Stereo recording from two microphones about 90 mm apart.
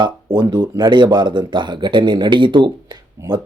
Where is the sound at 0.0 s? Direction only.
55° right (ahead or behind).